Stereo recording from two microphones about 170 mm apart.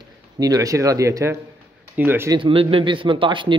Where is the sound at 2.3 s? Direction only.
30° right (ahead or behind).